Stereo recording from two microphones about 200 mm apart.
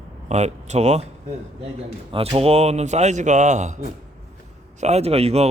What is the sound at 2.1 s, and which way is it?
Speech, 30° right (ahead or behind).